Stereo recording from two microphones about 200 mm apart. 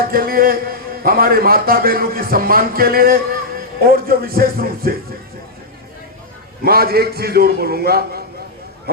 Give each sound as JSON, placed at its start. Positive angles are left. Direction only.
{"t": 0.0, "sound": "a man's voice", "side_deg": -50}
{"t": 6.7, "sound": "a man's voice", "side_deg": -50}